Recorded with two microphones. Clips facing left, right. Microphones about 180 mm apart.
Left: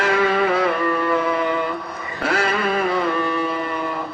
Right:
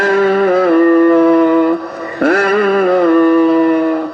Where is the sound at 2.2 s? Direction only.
55° right (ahead or behind).